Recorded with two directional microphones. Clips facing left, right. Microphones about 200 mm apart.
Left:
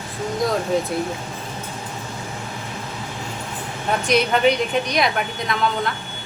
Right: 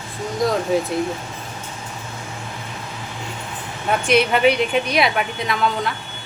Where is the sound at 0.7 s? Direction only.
5° right (ahead or behind).